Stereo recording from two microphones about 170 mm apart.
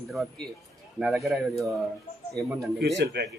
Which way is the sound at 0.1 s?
Centre (ahead or behind).